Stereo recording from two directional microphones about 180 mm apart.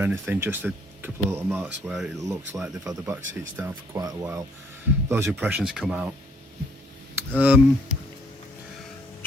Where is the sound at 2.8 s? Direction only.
20° right (ahead or behind).